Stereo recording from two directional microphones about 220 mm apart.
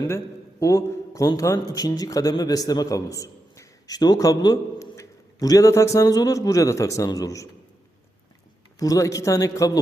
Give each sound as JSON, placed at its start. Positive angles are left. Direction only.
{"t": 0.6, "sound": "a man's voice", "side_deg": 15}
{"t": 8.8, "sound": "a man's voice", "side_deg": 15}